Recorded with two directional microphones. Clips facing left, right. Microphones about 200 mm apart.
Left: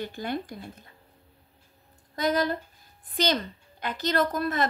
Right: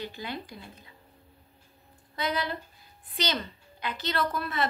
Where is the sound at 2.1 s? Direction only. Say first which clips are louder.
Left 6 dB; 45° left (ahead or behind).